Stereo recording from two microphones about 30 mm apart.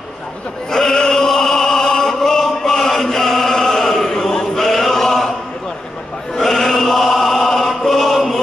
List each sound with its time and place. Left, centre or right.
0.7 s opera: centre
4.6 s choir: centre
6.3 s chant: centre